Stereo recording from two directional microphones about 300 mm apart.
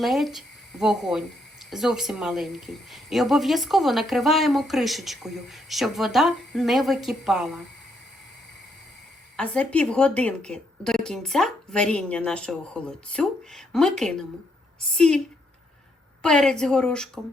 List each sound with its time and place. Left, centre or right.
0.0 s speech: centre
9.3 s speech: centre
16.2 s speech: centre